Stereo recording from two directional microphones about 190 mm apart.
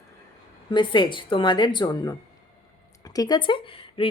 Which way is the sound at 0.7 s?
25° left (ahead or behind).